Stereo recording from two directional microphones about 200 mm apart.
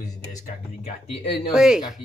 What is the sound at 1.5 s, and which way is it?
Speech, 5° right (ahead or behind).